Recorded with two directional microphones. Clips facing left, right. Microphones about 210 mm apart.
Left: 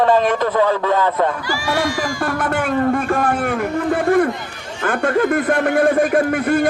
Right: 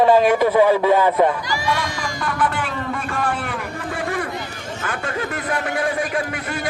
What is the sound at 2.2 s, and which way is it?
Speech, 45° left (ahead or behind).